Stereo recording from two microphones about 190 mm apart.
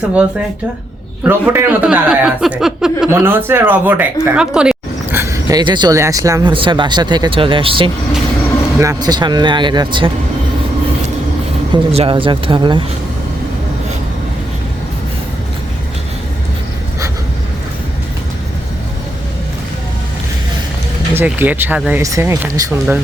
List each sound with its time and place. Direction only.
1.2 s a man's voice: 10° right (ahead or behind)
11.7 s speech: 30° right (ahead or behind)
21.1 s a woman's voice: 10° right (ahead or behind)